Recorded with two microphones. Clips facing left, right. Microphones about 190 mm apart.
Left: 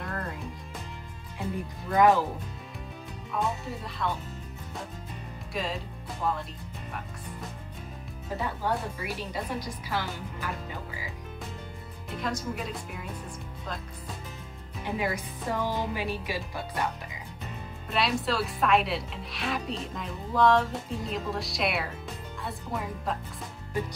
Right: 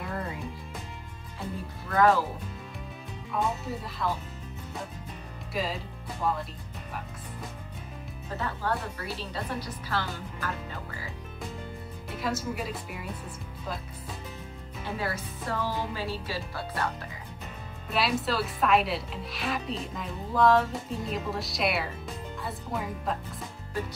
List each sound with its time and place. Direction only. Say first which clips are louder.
0.0 s music: right 1 dB; 5° right (ahead or behind)
1.9 s speech: left 1 dB; 15° left (ahead or behind)
3.3 s speech: right 1 dB; centre (ahead or behind)
5.5 s speech: right 1 dB; centre (ahead or behind)
8.4 s speech: left 1 dB; 15° left (ahead or behind)
12.2 s speech: right 1 dB; 5° right (ahead or behind)
14.9 s speech: left 2 dB; 15° left (ahead or behind)
17.9 s speech: even; centre (ahead or behind)